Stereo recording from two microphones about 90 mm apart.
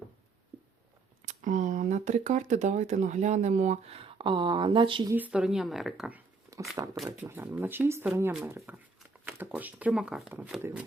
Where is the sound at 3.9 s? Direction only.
90° right; by 5.0 s 70° right (ahead or behind).